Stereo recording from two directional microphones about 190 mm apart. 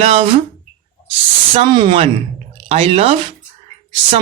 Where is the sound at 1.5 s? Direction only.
25° right (ahead or behind).